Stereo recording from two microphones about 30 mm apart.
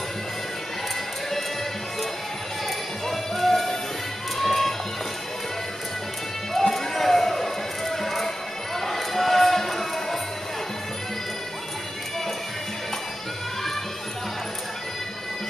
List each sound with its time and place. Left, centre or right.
3.1 s music: centre
6.7 s run: centre
8.7 s a sound: centre